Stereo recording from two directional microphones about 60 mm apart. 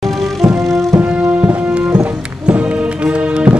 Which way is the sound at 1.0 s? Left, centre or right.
Right.